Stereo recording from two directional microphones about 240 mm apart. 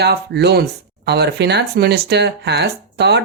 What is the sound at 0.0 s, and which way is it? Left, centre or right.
Speech, right.